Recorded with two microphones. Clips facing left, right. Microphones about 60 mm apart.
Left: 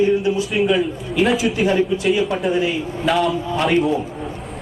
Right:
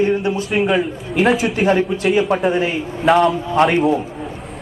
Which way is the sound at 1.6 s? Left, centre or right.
Right.